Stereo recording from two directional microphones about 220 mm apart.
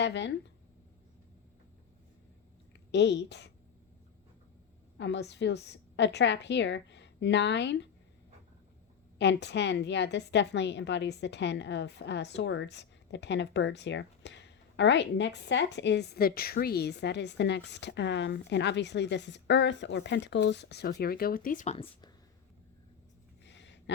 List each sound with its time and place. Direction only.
0.0 s a woman's voice: 55° left (ahead or behind)
2.9 s a woman's voice: 50° left (ahead or behind)
4.9 s a woman's voice: 50° left (ahead or behind)
9.1 s a woman's voice: 50° left (ahead or behind); by 21.8 s 30° left (ahead or behind)
23.4 s a sound: 55° left (ahead or behind)